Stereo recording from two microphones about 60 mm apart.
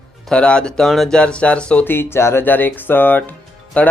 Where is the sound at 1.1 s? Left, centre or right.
Centre.